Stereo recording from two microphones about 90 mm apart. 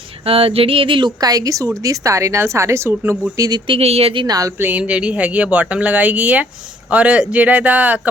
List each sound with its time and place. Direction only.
0.3 s a sound: 90° right; by 1.1 s 70° right (ahead or behind)
1.2 s speech: 40° right (ahead or behind)
3.3 s speech: 40° right (ahead or behind)
3.7 s speech: 90° right
4.3 s speech: 40° right (ahead or behind)
4.5 s speech: 20° right (ahead or behind)